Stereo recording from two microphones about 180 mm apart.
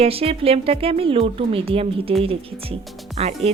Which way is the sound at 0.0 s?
30° right (ahead or behind).